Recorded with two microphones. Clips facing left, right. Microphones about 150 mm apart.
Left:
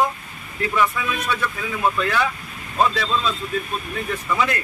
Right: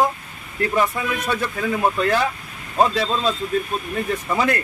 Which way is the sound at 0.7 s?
40° right (ahead or behind).